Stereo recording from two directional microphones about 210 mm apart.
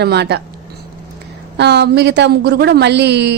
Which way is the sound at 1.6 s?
55° right (ahead or behind).